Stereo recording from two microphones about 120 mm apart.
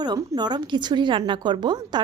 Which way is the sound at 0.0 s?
35° right (ahead or behind).